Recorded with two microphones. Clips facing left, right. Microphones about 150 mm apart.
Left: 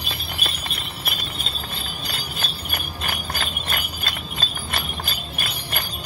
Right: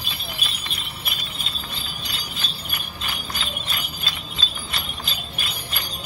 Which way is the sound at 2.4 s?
55° left (ahead or behind).